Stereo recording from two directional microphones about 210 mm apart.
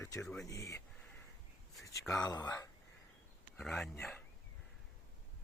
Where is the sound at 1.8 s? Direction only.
15° left (ahead or behind).